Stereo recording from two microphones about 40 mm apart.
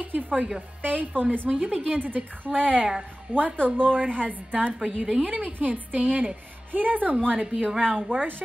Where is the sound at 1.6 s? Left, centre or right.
Right.